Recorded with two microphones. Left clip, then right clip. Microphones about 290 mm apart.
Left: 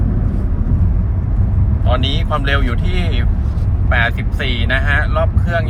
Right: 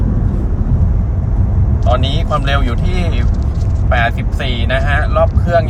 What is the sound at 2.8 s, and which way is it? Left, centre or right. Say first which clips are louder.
Speech: right 2 dB; left.